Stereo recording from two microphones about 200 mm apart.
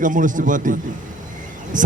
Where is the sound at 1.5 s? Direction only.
40° right (ahead or behind).